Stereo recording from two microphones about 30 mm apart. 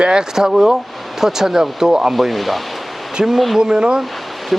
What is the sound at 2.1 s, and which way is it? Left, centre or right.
Speech, centre.